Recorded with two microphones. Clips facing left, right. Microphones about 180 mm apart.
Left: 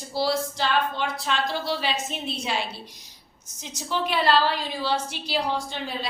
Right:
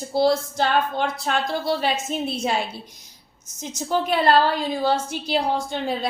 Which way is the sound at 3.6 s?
50° right (ahead or behind).